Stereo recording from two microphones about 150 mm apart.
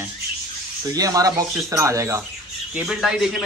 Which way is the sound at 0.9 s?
25° right (ahead or behind).